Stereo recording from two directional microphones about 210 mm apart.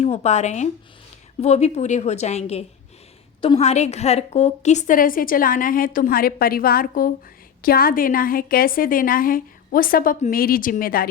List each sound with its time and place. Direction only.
0.0 s a woman's voice: 30° left (ahead or behind)